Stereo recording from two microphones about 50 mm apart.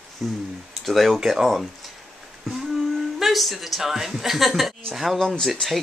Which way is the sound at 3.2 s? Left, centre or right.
Centre.